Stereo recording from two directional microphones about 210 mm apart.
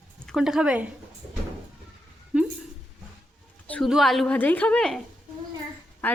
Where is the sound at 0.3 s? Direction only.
5° right (ahead or behind).